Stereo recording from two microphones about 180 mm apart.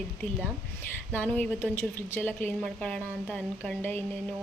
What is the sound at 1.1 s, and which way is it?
A woman's voice, 10° left (ahead or behind).